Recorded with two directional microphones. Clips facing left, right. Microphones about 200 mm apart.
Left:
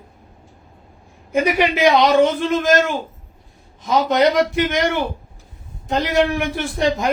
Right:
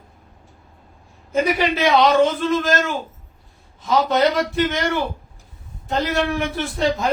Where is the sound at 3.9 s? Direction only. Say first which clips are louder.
Left 2 dB; 15° left (ahead or behind).